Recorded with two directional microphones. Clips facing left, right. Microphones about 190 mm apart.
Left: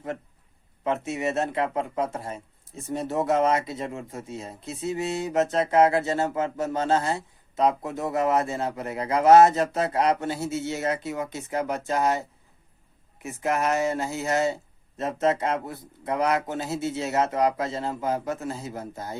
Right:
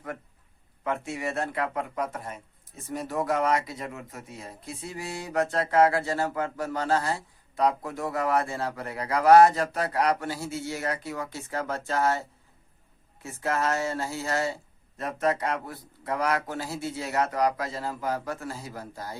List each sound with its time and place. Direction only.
0.9 s speech: 20° left (ahead or behind)